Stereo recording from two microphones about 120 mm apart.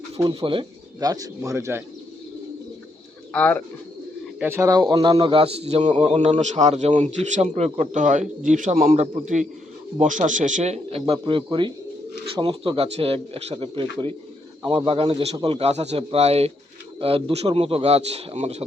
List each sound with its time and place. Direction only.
0.3 s speech: 45° right (ahead or behind)
0.9 s speech: 30° right (ahead or behind)
3.3 s speech: 10° left (ahead or behind)
4.4 s a man's voice: 25° right (ahead or behind); by 6.0 s 70° right (ahead or behind)
6.0 s speech: 55° right (ahead or behind)
6.4 s speech: 75° right (ahead or behind)
7.0 s speech: 85° right; by 18.6 s 60° right (ahead or behind)